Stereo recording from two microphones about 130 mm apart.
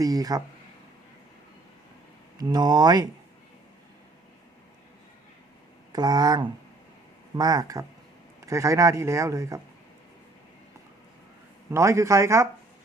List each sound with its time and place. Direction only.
0.0 s speech: 30° right (ahead or behind)
2.4 s speech: 30° right (ahead or behind)
5.9 s speech: 30° right (ahead or behind)
11.7 s speech: 25° right (ahead or behind)